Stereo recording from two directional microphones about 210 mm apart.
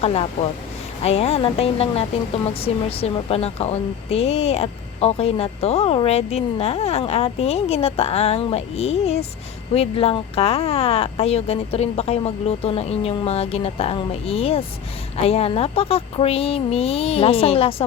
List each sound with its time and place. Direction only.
0.0 s speech: 30° left (ahead or behind)